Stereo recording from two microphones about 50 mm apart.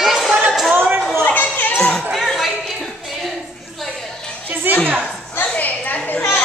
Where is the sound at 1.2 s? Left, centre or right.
Left.